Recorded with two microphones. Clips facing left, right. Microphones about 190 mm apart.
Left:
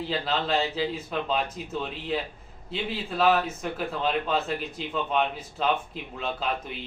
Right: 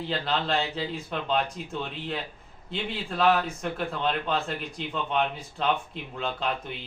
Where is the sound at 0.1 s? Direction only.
Centre (ahead or behind).